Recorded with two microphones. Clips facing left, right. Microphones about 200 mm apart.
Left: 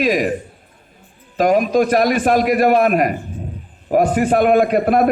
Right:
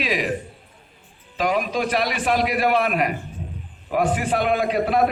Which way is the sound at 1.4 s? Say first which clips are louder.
Left 8 dB; 45° left (ahead or behind).